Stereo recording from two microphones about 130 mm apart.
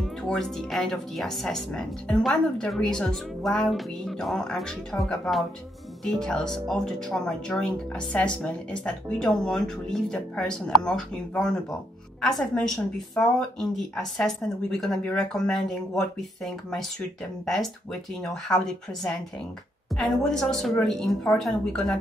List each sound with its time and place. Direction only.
0.0 s speech: 5° left (ahead or behind)
12.7 s speech: 25° left (ahead or behind)
13.6 s speech: 5° left (ahead or behind)
18.2 s speech: 5° left (ahead or behind)